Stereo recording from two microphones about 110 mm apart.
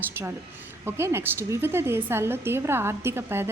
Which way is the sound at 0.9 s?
20° right (ahead or behind).